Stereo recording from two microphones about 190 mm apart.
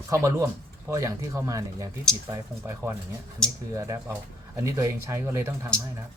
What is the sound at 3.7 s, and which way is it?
Speech, 15° right (ahead or behind).